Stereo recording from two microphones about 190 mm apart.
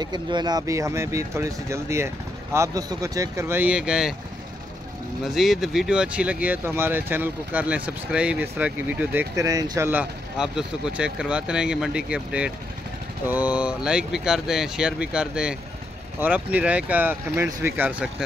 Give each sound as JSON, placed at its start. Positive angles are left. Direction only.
{"t": 0.0, "sound": "speech", "side_deg": -20}
{"t": 5.2, "sound": "speech", "side_deg": 0}